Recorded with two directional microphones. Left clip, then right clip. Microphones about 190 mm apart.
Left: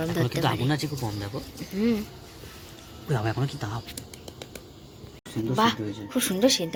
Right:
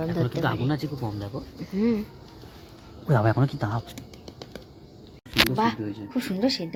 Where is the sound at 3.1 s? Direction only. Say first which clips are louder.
Right 6 dB; 45° right (ahead or behind).